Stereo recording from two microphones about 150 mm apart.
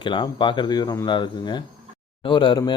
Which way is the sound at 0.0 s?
30° left (ahead or behind).